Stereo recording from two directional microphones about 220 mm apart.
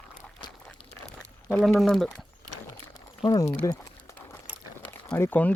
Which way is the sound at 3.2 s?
20° left (ahead or behind).